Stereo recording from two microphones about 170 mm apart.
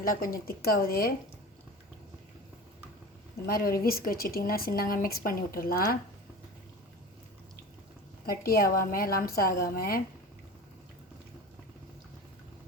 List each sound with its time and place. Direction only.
0.0 s speech: 55° left (ahead or behind)
3.4 s speech: 60° left (ahead or behind)
8.3 s speech: 60° left (ahead or behind)